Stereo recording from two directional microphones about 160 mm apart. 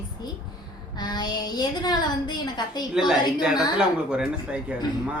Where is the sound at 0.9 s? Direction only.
25° left (ahead or behind).